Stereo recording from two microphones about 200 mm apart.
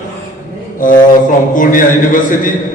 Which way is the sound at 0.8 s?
40° left (ahead or behind).